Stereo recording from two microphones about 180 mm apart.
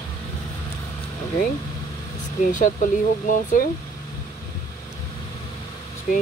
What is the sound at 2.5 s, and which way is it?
Speech, 45° left (ahead or behind).